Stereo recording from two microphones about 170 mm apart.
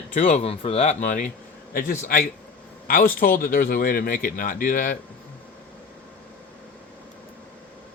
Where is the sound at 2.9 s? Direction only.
55° left (ahead or behind).